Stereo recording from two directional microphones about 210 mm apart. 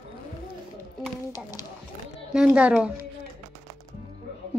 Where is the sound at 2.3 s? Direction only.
5° right (ahead or behind).